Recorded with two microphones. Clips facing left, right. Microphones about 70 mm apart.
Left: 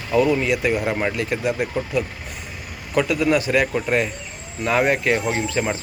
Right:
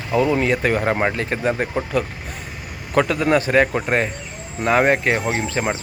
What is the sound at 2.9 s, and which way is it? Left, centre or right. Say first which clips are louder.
Speech: right 2 dB; right.